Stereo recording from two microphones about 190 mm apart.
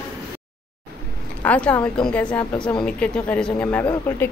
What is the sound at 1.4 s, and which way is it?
A woman's voice, 5° left (ahead or behind).